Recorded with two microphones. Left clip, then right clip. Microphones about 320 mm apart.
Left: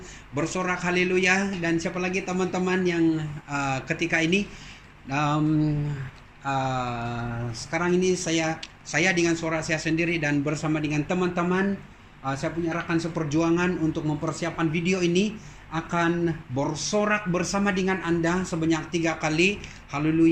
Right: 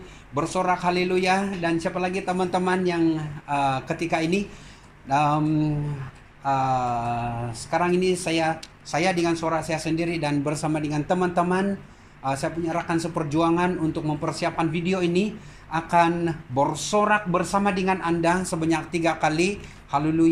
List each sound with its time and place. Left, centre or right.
0.3 s speech: centre